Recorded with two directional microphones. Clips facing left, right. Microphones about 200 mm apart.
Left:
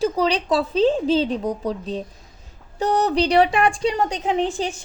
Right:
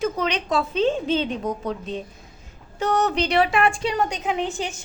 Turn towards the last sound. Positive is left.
turn(degrees=35)  # may be behind; listen again after turning